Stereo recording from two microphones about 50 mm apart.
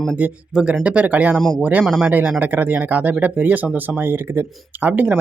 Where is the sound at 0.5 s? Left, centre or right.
Right.